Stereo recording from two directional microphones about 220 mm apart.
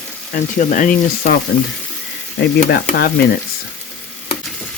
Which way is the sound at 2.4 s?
50° left (ahead or behind).